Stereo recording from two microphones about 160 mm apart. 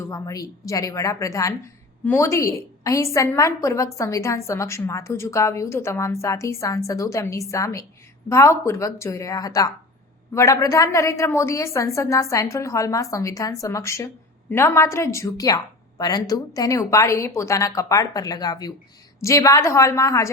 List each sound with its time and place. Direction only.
0.0 s a woman's voice: 20° left (ahead or behind)